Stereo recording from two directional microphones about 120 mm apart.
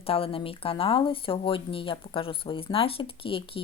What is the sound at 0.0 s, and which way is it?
Speech, 50° left (ahead or behind).